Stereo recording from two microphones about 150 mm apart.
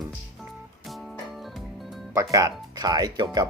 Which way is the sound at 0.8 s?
Centre (ahead or behind).